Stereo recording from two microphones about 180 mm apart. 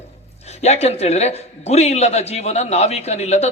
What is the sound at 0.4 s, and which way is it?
A man's voice, 35° left (ahead or behind).